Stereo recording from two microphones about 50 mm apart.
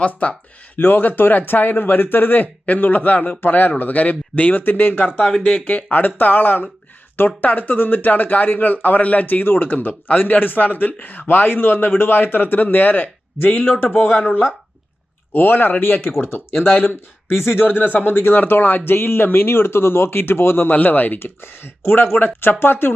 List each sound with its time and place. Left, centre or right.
0.0 s speech: left
0.8 s speech: left
20.7 s speech: left